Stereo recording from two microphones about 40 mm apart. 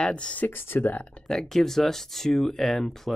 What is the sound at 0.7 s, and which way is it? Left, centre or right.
Speech, left.